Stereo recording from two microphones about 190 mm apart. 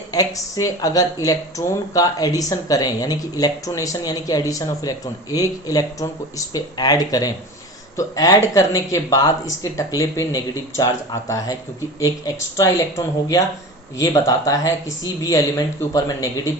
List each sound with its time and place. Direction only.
0.1 s speech: 20° left (ahead or behind)
14.0 s speech: 20° left (ahead or behind)